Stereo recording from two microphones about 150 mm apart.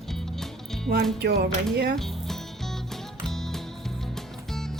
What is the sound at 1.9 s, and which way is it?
Music, centre (ahead or behind).